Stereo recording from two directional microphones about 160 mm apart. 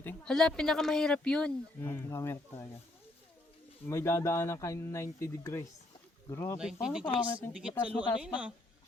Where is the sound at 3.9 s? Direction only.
15° left (ahead or behind).